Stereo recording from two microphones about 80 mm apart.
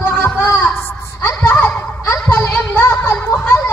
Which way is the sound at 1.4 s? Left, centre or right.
Centre.